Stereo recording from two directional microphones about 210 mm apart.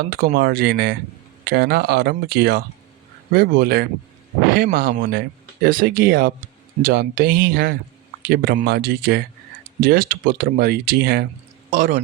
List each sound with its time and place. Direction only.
0.1 s speech: 45° right (ahead or behind)